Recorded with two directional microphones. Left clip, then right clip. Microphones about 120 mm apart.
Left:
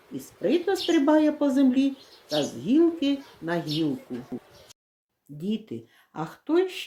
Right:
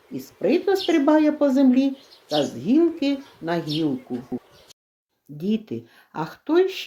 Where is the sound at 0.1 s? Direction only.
35° right (ahead or behind).